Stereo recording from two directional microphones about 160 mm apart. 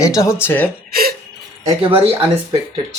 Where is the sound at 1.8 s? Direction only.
35° right (ahead or behind).